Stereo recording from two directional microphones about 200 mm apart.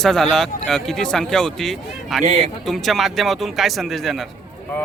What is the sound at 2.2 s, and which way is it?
Speech, 35° right (ahead or behind).